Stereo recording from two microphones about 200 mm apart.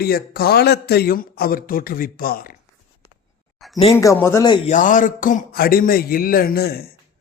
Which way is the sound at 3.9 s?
10° left (ahead or behind).